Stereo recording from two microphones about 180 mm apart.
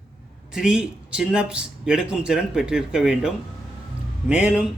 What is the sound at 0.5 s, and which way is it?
Speech, 5° right (ahead or behind).